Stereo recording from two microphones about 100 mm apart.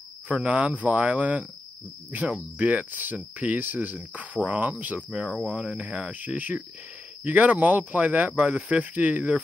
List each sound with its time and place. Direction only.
0.3 s cricket: 15° right (ahead or behind)